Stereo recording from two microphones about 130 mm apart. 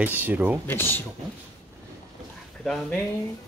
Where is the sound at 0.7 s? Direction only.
15° left (ahead or behind).